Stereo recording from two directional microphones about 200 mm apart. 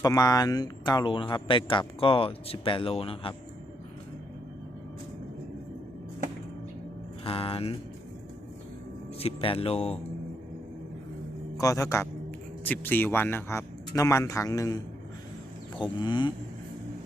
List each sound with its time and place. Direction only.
0.0 s speech: 20° left (ahead or behind)
7.3 s speech: 25° left (ahead or behind)
9.1 s speech: 30° left (ahead or behind)
11.5 s speech: 15° left (ahead or behind)
15.8 s speech: 25° left (ahead or behind)